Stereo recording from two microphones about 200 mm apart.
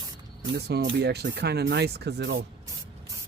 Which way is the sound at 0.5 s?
60° right (ahead or behind).